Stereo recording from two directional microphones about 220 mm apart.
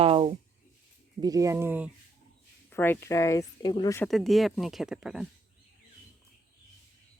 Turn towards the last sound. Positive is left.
turn(degrees=-5)  # may be behind; listen again after turning